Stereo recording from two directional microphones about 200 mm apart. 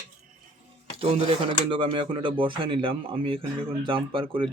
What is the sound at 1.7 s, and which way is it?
Speech, 25° right (ahead or behind).